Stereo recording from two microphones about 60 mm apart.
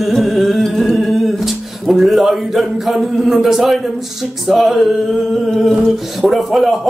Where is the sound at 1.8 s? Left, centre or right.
Centre.